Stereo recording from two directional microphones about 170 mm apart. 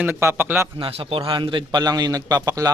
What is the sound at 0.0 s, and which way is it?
Speech, 15° right (ahead or behind).